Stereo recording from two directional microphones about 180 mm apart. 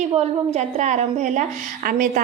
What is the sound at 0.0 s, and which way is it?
A woman's voice, 35° right (ahead or behind).